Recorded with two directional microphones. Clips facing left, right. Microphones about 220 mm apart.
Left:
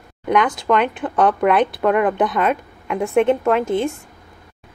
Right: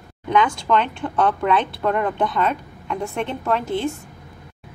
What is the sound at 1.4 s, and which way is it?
Speech, 65° left (ahead or behind).